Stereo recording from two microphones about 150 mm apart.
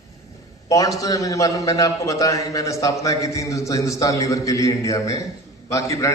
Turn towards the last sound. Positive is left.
turn(degrees=20)  # may be behind; listen again after turning